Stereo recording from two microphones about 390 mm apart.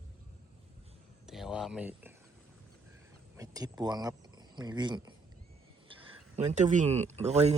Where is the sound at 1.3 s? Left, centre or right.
Centre.